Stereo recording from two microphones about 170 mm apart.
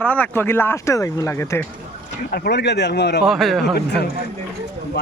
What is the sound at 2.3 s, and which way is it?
Speech, 75° left (ahead or behind).